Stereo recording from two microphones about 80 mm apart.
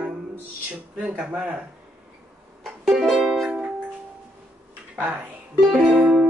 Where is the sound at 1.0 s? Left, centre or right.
Centre.